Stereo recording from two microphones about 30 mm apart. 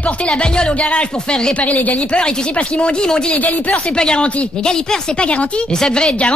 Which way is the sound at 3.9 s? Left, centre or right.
Left.